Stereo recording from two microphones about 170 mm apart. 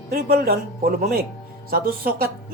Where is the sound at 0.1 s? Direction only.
60° right (ahead or behind).